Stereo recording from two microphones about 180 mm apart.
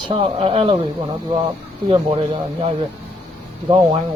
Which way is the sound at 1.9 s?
30° right (ahead or behind).